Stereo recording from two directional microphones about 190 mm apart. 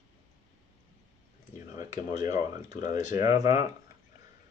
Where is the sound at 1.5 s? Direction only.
20° right (ahead or behind).